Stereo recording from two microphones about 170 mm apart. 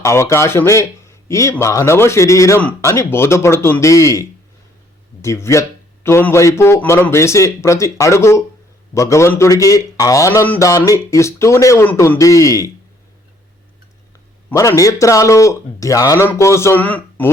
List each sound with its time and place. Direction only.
0.0 s a man's voice: 15° left (ahead or behind)
14.5 s a man's voice: 20° left (ahead or behind)